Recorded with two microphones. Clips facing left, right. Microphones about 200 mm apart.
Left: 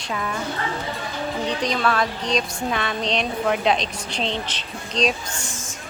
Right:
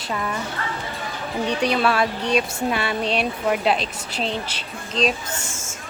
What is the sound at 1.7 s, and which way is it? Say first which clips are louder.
A woman's voice: right 2 dB; 10° right (ahead or behind).